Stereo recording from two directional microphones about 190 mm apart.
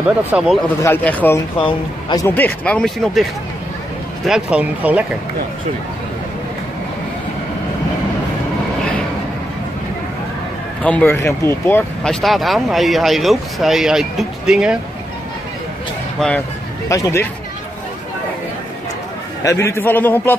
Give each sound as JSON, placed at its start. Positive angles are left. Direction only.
{"t": 0.3, "sound": "speech", "side_deg": 0}
{"t": 0.8, "sound": "a man's voice", "side_deg": 10}
{"t": 1.6, "sound": "a man's voice", "side_deg": 25}
{"t": 2.2, "sound": "speech", "side_deg": 10}
{"t": 4.3, "sound": "speech", "side_deg": -5}
{"t": 10.8, "sound": "speech", "side_deg": 5}
{"t": 16.2, "sound": "a man's voice", "side_deg": 5}
{"t": 19.4, "sound": "a man's voice", "side_deg": 15}